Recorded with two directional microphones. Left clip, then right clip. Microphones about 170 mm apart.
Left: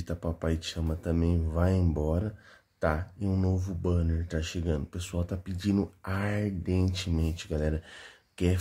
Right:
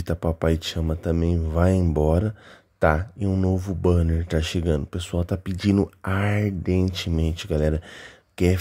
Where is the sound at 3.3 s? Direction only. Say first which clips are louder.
Right 7 dB; 35° right (ahead or behind).